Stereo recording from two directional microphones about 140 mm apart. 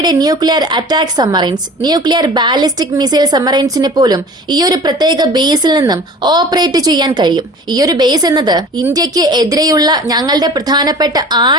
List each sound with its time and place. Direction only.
0.0 s a woman's voice: 25° right (ahead or behind)